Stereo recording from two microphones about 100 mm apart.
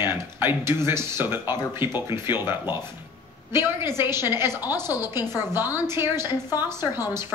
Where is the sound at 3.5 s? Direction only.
25° right (ahead or behind).